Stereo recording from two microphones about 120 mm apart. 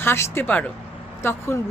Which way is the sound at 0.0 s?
20° left (ahead or behind).